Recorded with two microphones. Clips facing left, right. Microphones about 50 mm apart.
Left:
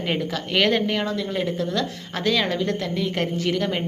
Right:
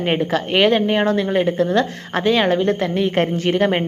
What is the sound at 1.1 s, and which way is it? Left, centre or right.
A woman's voice, right.